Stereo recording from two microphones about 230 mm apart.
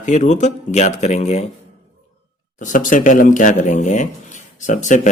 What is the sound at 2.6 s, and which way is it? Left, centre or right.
Speech, left.